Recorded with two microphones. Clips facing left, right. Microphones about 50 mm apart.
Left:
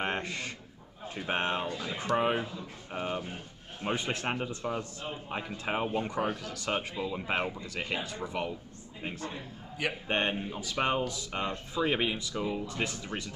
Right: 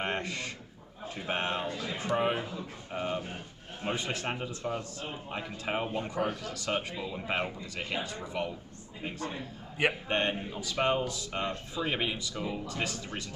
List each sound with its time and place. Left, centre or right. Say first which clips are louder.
0.0 s a sound: even; centre
1.3 s speech: left 1 dB; centre
1.7 s speech: left 1 dB; centre
3.9 s speech: left 2 dB; centre
10.0 s speech: even; centre